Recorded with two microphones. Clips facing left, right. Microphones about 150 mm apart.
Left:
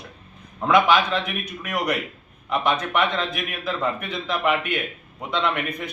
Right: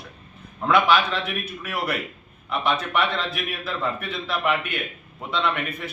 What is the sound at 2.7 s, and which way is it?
Speech, 5° right (ahead or behind).